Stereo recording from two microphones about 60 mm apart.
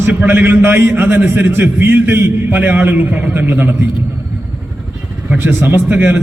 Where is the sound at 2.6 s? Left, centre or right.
Right.